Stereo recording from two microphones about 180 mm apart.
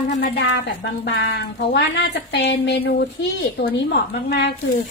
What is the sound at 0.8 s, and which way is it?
Speech, 70° left (ahead or behind).